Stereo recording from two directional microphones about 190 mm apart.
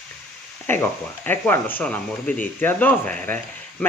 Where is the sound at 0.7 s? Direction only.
10° left (ahead or behind).